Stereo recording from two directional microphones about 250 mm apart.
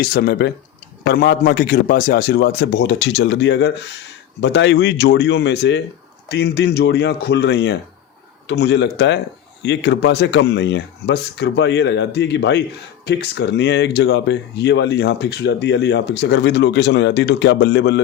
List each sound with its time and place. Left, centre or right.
0.0 s a man's voice: left